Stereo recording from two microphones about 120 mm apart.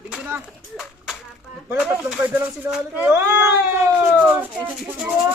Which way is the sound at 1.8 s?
10° right (ahead or behind).